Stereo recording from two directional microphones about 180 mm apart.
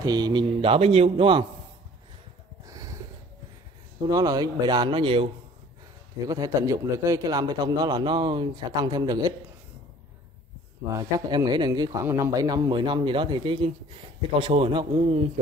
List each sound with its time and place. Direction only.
0.0 s speech: 25° right (ahead or behind)
2.6 s a sound: 20° right (ahead or behind)
4.1 s speech: 20° right (ahead or behind)
11.0 s speech: 20° right (ahead or behind)